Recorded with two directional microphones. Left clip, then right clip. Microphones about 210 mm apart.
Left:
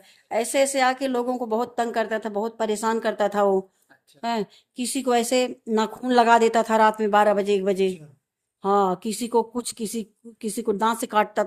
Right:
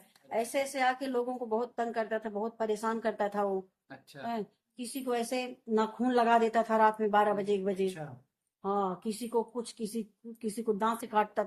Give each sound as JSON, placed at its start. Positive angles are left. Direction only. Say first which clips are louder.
{"t": 0.3, "sound": "speech", "louder": "left 10 dB", "side_deg": 55}